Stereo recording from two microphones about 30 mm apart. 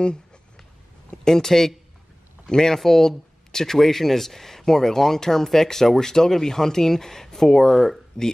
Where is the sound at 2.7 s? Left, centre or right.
Centre.